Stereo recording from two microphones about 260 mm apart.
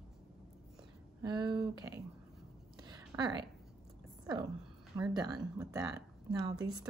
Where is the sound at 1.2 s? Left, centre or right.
Centre.